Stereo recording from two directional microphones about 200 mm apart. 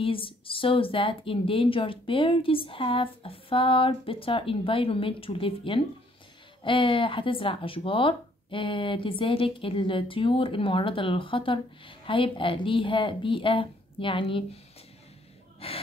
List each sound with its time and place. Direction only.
0.0 s speech: 25° left (ahead or behind)
15.6 s speech: 30° left (ahead or behind)